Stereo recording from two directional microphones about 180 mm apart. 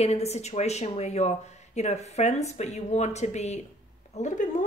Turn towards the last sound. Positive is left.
turn(degrees=45)  # may be behind; listen again after turning